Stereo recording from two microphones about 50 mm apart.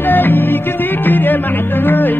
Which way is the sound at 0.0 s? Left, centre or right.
Left.